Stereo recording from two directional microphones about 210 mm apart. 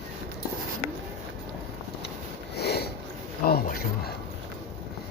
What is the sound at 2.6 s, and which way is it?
Sniff, 50° left (ahead or behind).